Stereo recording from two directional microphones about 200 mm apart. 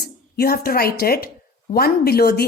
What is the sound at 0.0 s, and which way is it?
Speech, 50° left (ahead or behind).